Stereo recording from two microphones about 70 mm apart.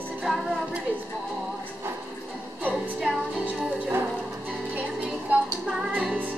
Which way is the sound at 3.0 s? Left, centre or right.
Centre.